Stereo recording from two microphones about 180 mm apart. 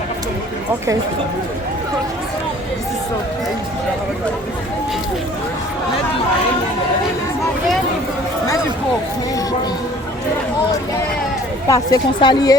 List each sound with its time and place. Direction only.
11.7 s a woman's voice: 20° left (ahead or behind)